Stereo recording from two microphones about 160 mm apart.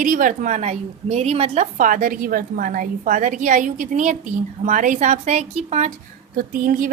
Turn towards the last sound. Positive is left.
turn(degrees=-60)  # may be behind; listen again after turning